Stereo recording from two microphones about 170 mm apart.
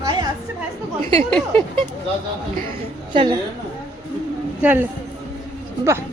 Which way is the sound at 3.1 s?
25° right (ahead or behind).